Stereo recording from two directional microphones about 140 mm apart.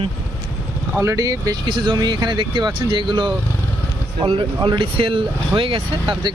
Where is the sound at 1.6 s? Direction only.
35° right (ahead or behind).